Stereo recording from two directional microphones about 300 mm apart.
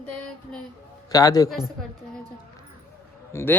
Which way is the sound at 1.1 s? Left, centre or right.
Centre.